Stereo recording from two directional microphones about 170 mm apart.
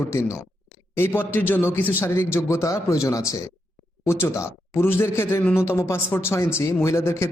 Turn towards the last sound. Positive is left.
turn(degrees=15)  # may be behind; listen again after turning